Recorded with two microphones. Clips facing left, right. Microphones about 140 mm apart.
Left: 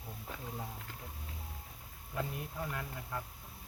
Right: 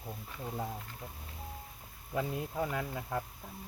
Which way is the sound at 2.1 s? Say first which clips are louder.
Right 5 dB; 90° right.